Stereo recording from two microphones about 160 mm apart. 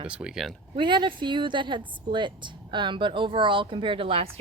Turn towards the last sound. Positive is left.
turn(degrees=-35)  # may be behind; listen again after turning